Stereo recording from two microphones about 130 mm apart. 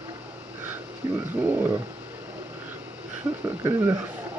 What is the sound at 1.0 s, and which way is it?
Dog, 35° right (ahead or behind).